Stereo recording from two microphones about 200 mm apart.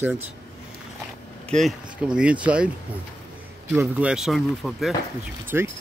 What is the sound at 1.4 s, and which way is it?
Speech, centre (ahead or behind).